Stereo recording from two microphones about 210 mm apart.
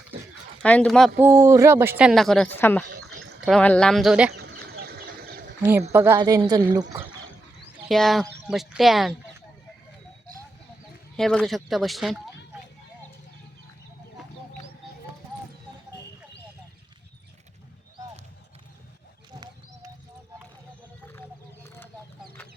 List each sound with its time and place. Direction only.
0.6 s speech: 5° left (ahead or behind)
1.2 s speech: 15° right (ahead or behind); by 2.8 s 10° left (ahead or behind)
3.0 s a sound: 90° right
3.4 s speech: 5° left (ahead or behind)
4.4 s a sound: 50° right (ahead or behind)
5.9 s a woman's voice: 10° right (ahead or behind)
7.9 s speech: centre (ahead or behind)
11.2 s speech: 5° left (ahead or behind)
21.1 s chicken: 10° left (ahead or behind)